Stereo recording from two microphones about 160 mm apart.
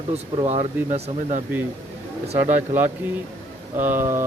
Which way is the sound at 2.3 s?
15° right (ahead or behind).